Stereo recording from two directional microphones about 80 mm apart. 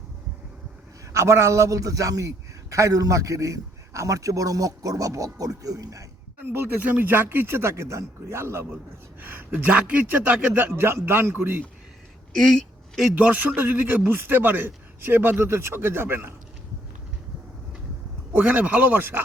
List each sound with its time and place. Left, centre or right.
1.1 s a man's voice: right
6.4 s speech: right
12.3 s a sound: centre
13.1 s speech: centre
18.3 s speech: centre